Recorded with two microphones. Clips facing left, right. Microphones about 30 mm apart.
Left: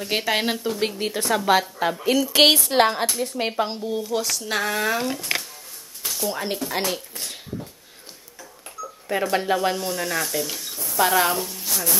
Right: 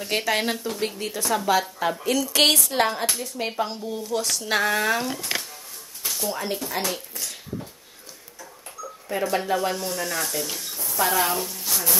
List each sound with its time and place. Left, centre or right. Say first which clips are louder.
0.0 s a woman's voice: left 1 dB; centre
0.7 s a woman's voice: left 3 dB; left
2.7 s a woman's voice: left 4 dB; left; by 4.2 s centre
4.2 s speech: right 1 dB; centre
6.0 s a sound: left 1 dB; centre
6.3 s a woman's voice: left 2 dB; centre
9.1 s a woman's voice: left 2 dB; centre
11.1 s a woman's voice: left 2 dB; centre